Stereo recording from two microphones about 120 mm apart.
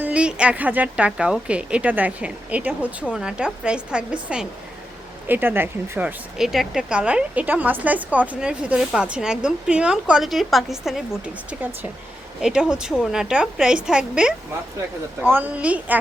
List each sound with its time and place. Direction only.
0.0 s a woman's voice: 10° right (ahead or behind)
6.3 s a woman's voice: 5° right (ahead or behind)